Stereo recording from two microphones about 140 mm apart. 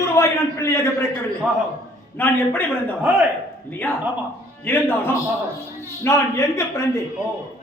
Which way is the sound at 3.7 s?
15° left (ahead or behind).